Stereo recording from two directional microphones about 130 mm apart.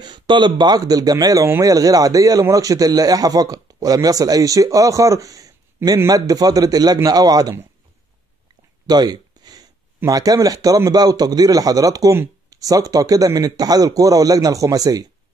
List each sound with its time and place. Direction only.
0.0 s speech: 35° right (ahead or behind)
8.8 s a sound: 30° right (ahead or behind)
10.0 s speech: 30° right (ahead or behind)